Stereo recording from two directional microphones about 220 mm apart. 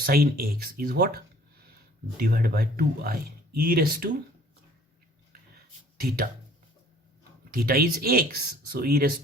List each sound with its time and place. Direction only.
0.0 s speech: 45° right (ahead or behind)
6.0 s speech: 40° right (ahead or behind)
7.5 s speech: 45° right (ahead or behind)